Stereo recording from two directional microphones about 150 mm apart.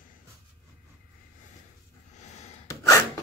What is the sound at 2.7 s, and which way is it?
Gasp, 20° left (ahead or behind).